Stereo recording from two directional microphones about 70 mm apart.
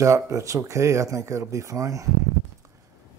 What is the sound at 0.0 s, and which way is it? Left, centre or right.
Speech, right.